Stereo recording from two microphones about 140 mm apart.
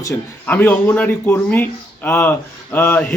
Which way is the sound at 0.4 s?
15° left (ahead or behind).